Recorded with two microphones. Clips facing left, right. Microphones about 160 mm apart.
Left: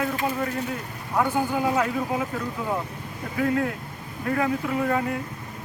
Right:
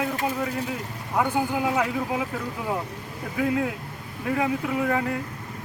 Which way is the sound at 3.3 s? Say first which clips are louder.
Left 1 dB; 10° right (ahead or behind).